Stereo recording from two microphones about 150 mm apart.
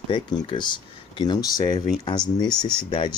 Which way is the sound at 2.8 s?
30° left (ahead or behind).